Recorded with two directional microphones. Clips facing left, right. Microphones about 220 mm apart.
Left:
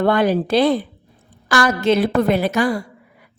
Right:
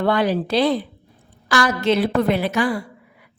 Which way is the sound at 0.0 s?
50° left (ahead or behind).